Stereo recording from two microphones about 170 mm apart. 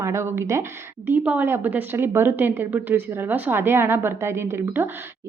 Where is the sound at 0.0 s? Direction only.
15° right (ahead or behind).